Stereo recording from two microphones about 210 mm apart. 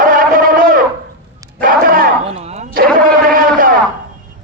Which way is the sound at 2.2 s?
30° right (ahead or behind).